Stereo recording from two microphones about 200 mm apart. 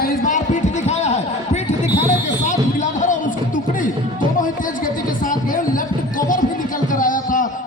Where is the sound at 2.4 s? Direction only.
35° left (ahead or behind).